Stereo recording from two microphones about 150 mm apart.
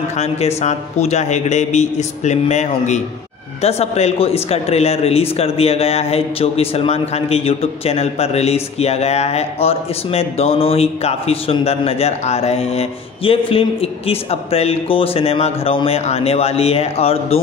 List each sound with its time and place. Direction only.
0.1 s a man's voice: 45° left (ahead or behind)